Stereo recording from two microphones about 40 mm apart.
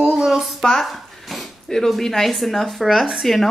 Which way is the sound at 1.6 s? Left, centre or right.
Centre.